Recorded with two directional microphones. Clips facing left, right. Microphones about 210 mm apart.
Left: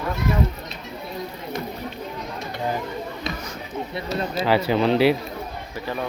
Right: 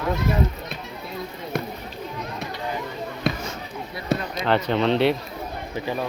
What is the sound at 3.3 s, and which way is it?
Basketball bounce, 60° right (ahead or behind).